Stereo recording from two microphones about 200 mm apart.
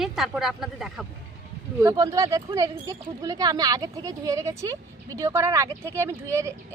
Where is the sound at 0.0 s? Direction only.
Centre (ahead or behind).